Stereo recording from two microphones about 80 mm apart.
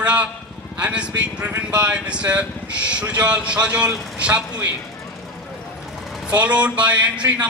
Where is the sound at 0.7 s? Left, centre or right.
Centre.